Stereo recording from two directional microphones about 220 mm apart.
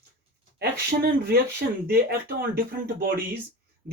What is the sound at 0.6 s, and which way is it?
Speech, 45° right (ahead or behind).